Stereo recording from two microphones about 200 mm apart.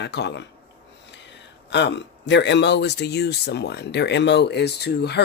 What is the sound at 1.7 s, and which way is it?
Speech, 60° left (ahead or behind).